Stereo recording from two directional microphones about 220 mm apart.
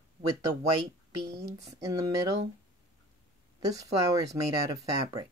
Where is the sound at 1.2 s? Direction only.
45° right (ahead or behind).